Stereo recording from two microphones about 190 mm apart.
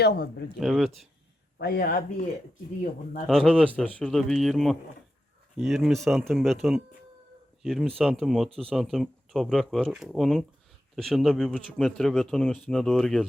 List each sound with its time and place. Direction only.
0.0 s speech: 60° left (ahead or behind)
0.6 s speech: centre (ahead or behind)
1.5 s speech: 55° left (ahead or behind)
3.2 s speech: centre (ahead or behind)